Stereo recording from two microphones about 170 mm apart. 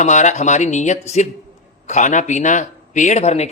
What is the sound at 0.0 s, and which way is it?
A man's voice, 45° left (ahead or behind).